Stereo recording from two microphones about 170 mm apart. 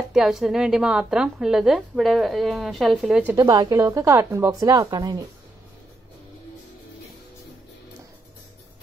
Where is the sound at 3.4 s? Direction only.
20° right (ahead or behind).